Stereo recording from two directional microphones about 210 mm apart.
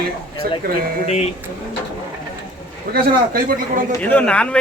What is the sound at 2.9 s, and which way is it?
Speech, 45° right (ahead or behind).